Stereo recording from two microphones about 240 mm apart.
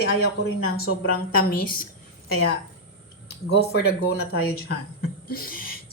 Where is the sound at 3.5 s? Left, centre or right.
Left.